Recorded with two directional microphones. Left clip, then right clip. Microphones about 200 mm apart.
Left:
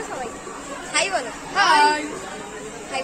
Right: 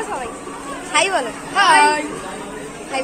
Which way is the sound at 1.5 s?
10° right (ahead or behind).